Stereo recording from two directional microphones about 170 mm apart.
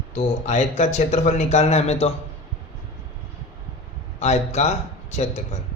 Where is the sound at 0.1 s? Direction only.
40° left (ahead or behind).